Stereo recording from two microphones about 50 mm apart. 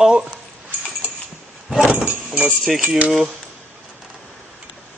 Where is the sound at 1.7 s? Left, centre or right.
Centre.